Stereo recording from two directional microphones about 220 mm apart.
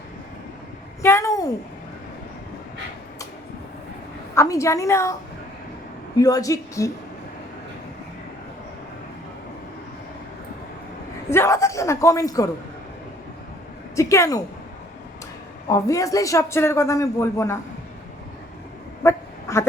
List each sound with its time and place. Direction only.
1.0 s a sound: 15° left (ahead or behind)
4.4 s a man's voice: 15° left (ahead or behind)
6.1 s a man's voice: 15° left (ahead or behind)
11.3 s a man's voice: 10° left (ahead or behind)
13.9 s a woman's voice: 15° left (ahead or behind)
15.7 s a man's voice: 15° left (ahead or behind)
19.0 s quack: 15° left (ahead or behind)